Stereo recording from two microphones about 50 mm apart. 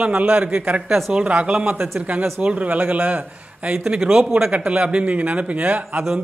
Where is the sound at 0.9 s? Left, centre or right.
Centre.